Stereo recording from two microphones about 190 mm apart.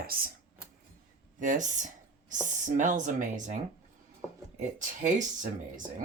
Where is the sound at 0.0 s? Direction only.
50° right (ahead or behind).